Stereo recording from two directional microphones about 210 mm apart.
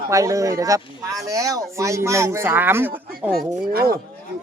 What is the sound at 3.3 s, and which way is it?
Speech, 45° right (ahead or behind).